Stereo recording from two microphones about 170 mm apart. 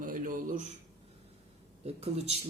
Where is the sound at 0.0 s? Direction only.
55° right (ahead or behind).